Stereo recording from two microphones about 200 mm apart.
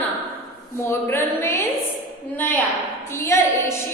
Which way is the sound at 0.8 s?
10° left (ahead or behind).